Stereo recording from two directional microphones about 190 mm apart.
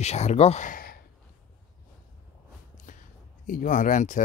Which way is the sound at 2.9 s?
40° left (ahead or behind).